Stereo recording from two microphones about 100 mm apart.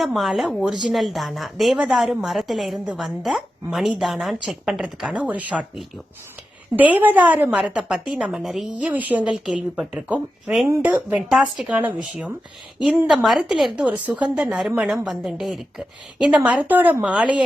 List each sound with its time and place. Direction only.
0.0 s a woman's voice: centre (ahead or behind)
6.7 s a woman's voice: 15° right (ahead or behind)
7.6 s a woman's voice: 10° right (ahead or behind)
8.8 s a woman's voice: 15° right (ahead or behind)
10.8 s a woman's voice: 15° right (ahead or behind)
11.3 s a woman's voice: 5° right (ahead or behind)
11.7 s a woman's voice: 15° right (ahead or behind)
13.1 s a woman's voice: centre (ahead or behind)